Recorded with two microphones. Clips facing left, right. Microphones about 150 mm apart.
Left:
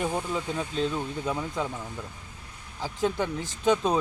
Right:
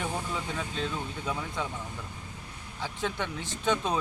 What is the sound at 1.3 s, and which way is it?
Speech, 30° left (ahead or behind).